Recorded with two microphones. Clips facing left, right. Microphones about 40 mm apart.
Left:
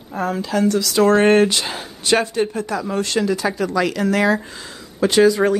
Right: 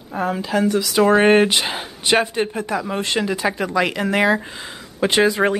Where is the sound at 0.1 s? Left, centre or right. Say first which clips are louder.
Even; centre.